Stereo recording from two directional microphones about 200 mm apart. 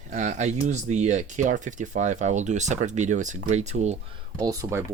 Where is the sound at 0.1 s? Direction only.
35° right (ahead or behind).